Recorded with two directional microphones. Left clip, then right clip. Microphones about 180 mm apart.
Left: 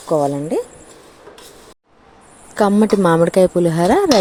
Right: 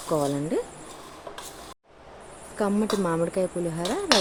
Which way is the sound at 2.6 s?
45° left (ahead or behind).